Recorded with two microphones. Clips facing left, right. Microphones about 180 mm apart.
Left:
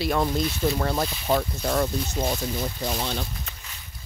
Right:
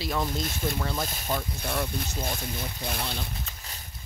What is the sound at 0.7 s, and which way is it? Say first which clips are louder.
Speech: left 4 dB; 55° left (ahead or behind).